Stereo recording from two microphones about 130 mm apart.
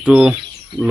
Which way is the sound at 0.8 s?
20° left (ahead or behind).